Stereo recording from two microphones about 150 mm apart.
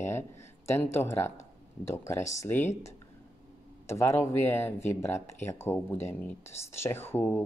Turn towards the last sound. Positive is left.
turn(degrees=15)  # may be behind; listen again after turning